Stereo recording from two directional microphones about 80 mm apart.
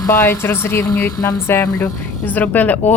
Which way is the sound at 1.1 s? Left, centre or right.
Left.